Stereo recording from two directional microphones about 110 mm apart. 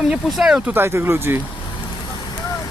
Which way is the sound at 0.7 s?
20° right (ahead or behind).